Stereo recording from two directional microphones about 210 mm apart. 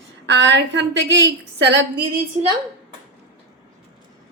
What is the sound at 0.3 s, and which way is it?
A woman's voice, 55° right (ahead or behind).